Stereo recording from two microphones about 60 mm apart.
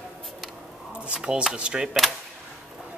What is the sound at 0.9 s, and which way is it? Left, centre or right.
Chopping, centre.